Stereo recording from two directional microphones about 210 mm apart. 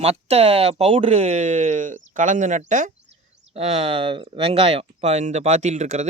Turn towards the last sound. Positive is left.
turn(degrees=-35)  # may be behind; listen again after turning